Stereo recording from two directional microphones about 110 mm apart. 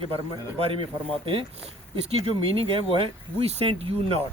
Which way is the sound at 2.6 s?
55° right (ahead or behind).